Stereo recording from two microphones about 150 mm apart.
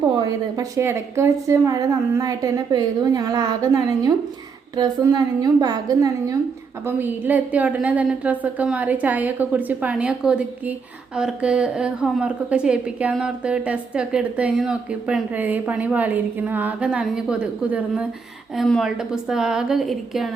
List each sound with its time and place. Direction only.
0.2 s a woman's voice: 25° right (ahead or behind)
6.8 s a woman's voice: 10° right (ahead or behind)